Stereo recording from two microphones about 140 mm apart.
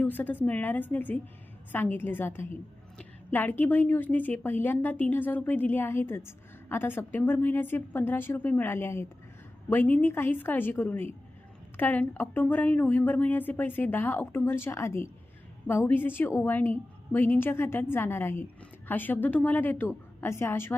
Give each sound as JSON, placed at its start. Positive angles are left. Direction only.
{"t": 0.0, "sound": "a woman's voice", "side_deg": 15}